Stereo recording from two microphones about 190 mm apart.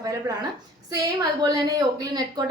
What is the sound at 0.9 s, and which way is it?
A woman's voice, 20° right (ahead or behind).